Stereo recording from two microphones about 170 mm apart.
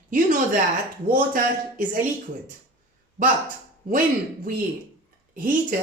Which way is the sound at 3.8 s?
55° right (ahead or behind).